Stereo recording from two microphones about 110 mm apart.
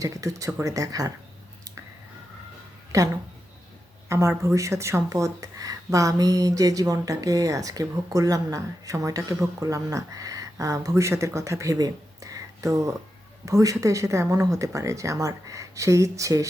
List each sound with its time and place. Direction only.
0.0 s speech: 30° right (ahead or behind)
2.9 s speech: 30° right (ahead or behind)
4.1 s speech: 25° right (ahead or behind)